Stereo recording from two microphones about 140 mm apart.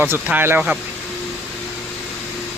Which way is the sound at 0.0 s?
15° right (ahead or behind).